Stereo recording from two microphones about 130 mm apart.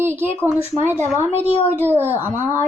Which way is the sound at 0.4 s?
5° right (ahead or behind).